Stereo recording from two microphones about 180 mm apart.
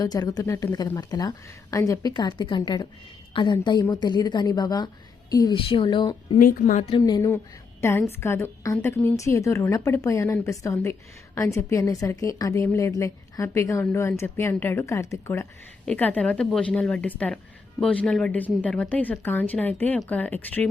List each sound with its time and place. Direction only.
0.0 s a woman's voice: 20° left (ahead or behind)
6.4 s a woman's voice: 50° left (ahead or behind)
6.9 s a woman's voice: 20° left (ahead or behind)